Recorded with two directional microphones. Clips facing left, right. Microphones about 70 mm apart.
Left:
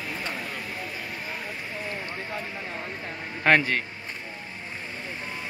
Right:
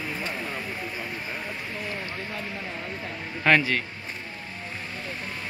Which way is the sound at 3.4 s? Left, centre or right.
Left.